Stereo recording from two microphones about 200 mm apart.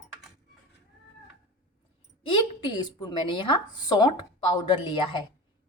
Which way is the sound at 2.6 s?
25° left (ahead or behind).